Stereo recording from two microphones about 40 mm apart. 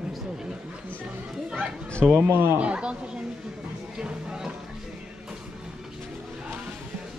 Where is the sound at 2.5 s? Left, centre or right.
Right.